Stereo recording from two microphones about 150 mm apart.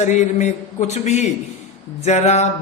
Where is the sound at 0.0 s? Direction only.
50° left (ahead or behind).